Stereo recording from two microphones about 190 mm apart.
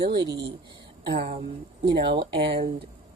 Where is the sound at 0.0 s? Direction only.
25° right (ahead or behind).